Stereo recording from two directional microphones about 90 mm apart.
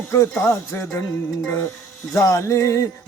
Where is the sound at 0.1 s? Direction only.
30° left (ahead or behind).